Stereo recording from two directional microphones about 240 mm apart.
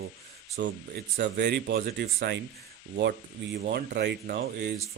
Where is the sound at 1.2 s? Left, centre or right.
Right.